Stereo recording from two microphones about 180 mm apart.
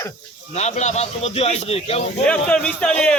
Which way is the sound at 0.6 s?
40° left (ahead or behind).